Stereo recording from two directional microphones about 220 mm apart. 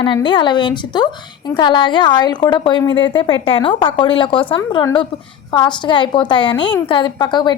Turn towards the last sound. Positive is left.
turn(degrees=20)  # may be behind; listen again after turning